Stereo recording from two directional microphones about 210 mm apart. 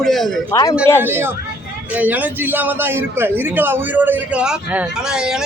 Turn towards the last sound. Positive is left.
turn(degrees=-5)  # may be behind; listen again after turning